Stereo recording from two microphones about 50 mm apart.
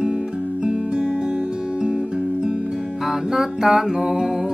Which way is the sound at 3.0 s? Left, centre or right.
Centre.